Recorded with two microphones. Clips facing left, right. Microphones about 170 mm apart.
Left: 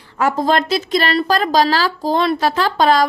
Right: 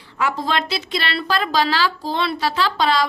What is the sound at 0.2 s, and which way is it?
Speech, 45° left (ahead or behind).